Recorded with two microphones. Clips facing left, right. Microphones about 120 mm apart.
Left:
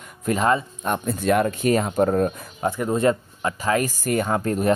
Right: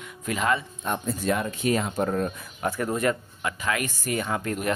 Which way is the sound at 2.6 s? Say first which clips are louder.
Left 5 dB; 20° left (ahead or behind).